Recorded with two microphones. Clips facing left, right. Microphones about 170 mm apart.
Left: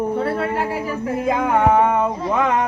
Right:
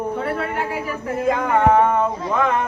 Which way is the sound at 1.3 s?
10° left (ahead or behind).